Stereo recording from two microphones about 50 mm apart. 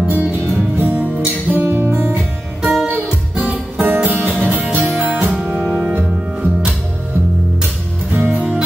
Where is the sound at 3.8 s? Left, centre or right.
Right.